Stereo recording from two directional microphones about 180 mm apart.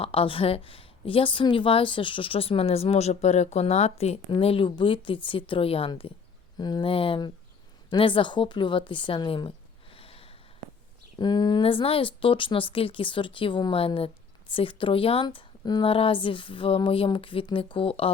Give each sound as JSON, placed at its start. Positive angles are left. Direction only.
{"t": 0.0, "sound": "speech", "side_deg": 30}
{"t": 9.9, "sound": "snort", "side_deg": 30}
{"t": 11.2, "sound": "speech", "side_deg": 25}